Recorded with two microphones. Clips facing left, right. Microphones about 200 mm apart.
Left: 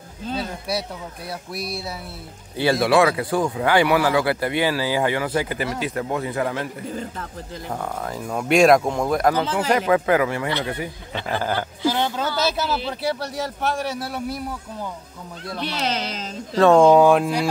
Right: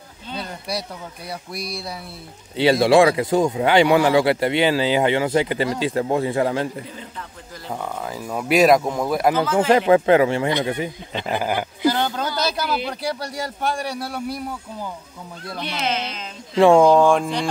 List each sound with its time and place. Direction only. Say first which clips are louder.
0.4 s a man's voice: even; 5° left (ahead or behind)
2.5 s speech: right 3 dB; 20° right (ahead or behind)
6.9 s speech: left 6 dB; 45° left (ahead or behind)
7.7 s a man's voice: even; 5° right (ahead or behind)
9.4 s speech: right 4 dB; 35° left (ahead or behind)
9.8 s speech: right 4 dB; 25° right (ahead or behind)
11.9 s a sound: even; centre (ahead or behind)
13.0 s a man's voice: left 1 dB; centre (ahead or behind)
15.8 s speech: right 2 dB; 40° left (ahead or behind)
16.5 s speech: right 1 dB; 15° right (ahead or behind)
16.8 s a man's voice: left 1 dB; 5° left (ahead or behind)